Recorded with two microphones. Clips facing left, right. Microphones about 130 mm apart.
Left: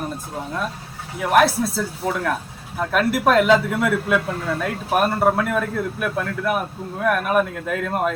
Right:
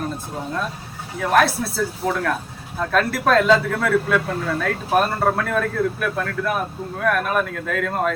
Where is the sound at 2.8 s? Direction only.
15° left (ahead or behind).